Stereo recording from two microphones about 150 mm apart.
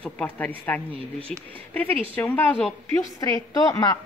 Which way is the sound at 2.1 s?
15° left (ahead or behind).